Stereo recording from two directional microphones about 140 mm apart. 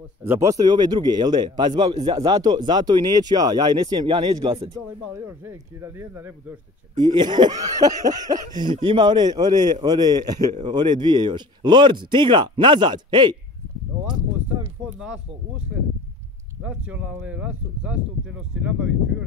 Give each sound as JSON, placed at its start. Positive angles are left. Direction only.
{"t": 0.2, "sound": "speech", "side_deg": -20}
{"t": 4.8, "sound": "speech", "side_deg": -20}
{"t": 7.0, "sound": "speech", "side_deg": -30}
{"t": 16.6, "sound": "speech", "side_deg": -10}